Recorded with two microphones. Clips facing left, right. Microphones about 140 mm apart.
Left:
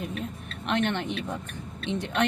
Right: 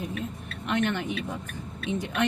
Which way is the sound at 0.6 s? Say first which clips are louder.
Even; 60° left (ahead or behind).